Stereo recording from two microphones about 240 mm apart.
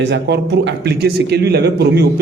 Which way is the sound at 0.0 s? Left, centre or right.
Right.